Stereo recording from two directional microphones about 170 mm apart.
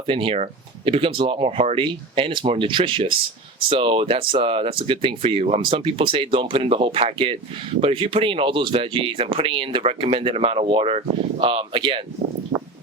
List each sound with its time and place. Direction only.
0.1 s speech: 30° right (ahead or behind)